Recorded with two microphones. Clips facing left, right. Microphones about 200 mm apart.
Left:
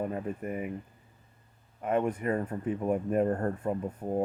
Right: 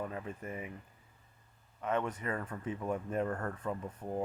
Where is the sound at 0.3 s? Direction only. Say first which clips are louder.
Left 8 dB; 50° left (ahead or behind).